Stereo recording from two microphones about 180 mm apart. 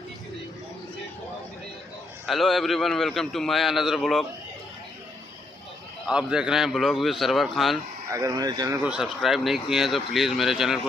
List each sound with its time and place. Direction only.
2.2 s a man's voice: centre (ahead or behind)
6.0 s a man's voice: 5° right (ahead or behind)
8.1 s speech: 20° right (ahead or behind)
8.8 s a man's voice: 5° right (ahead or behind)